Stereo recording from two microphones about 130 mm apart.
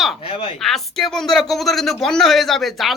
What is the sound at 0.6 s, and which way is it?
A woman's voice, centre (ahead or behind).